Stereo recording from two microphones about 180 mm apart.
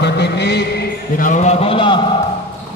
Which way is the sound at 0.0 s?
70° left (ahead or behind).